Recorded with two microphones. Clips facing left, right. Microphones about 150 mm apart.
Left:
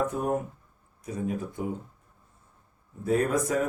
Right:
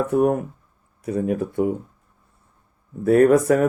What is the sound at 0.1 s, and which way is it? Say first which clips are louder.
Speech: right 10 dB; 65° right (ahead or behind).